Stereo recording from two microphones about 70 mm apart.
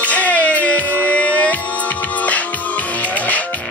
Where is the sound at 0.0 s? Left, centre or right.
Left.